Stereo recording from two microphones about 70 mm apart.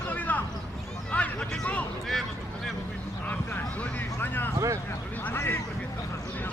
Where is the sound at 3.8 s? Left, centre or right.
Left.